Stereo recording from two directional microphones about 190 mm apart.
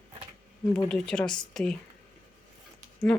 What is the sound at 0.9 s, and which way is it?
Speech, 5° left (ahead or behind).